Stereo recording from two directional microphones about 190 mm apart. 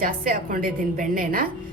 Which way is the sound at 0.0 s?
50° right (ahead or behind).